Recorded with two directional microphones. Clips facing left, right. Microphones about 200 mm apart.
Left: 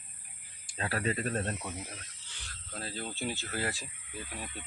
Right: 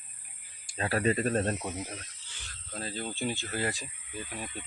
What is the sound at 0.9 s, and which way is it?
Speech, 25° right (ahead or behind).